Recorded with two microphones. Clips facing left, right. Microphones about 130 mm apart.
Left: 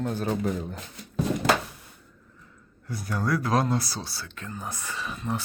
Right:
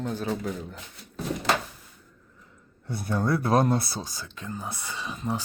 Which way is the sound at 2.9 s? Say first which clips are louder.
Right 2 dB; 25° right (ahead or behind).